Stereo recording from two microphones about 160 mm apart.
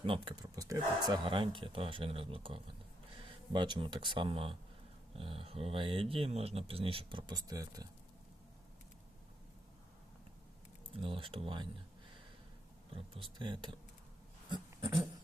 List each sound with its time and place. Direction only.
0.0 s speech: 35° right (ahead or behind)
0.5 s speech: 20° right (ahead or behind)
10.9 s speech: 35° right (ahead or behind)
12.9 s speech: 35° right (ahead or behind)